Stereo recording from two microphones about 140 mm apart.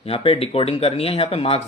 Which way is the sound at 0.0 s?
45° left (ahead or behind).